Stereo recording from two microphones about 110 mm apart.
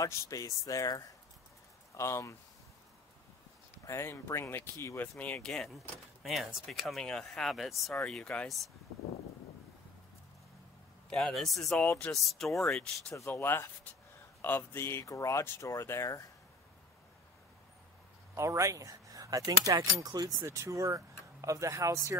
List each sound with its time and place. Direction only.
0.0 s speech: 30° left (ahead or behind)
3.8 s speech: 25° left (ahead or behind); by 8.5 s 10° left (ahead or behind)
11.1 s speech: 5° left (ahead or behind)
11.9 s speech: 20° left (ahead or behind)
12.2 s speech: centre (ahead or behind)
13.1 s speech: 20° left (ahead or behind)
18.3 s speech: 25° right (ahead or behind)